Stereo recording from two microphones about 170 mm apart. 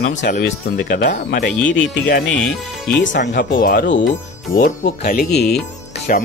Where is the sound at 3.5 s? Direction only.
60° left (ahead or behind); by 4.0 s 85° left.